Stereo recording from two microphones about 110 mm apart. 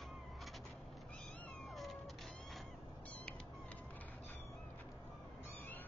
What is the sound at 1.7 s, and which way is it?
Cat, centre (ahead or behind).